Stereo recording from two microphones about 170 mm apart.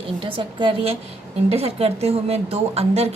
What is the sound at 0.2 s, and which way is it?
A woman's voice, 30° right (ahead or behind).